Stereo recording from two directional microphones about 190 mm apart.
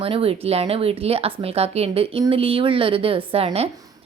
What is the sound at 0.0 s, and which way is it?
Speech, 30° right (ahead or behind).